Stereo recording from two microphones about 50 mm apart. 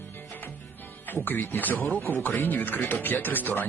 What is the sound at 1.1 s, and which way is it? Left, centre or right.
Speech, left.